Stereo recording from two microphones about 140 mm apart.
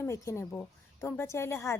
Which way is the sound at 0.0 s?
20° left (ahead or behind).